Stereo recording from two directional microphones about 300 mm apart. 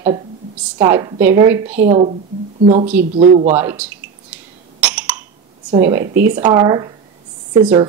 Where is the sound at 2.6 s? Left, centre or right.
Right.